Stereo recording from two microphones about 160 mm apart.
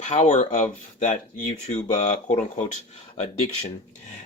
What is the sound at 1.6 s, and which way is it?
Speech, 45° left (ahead or behind).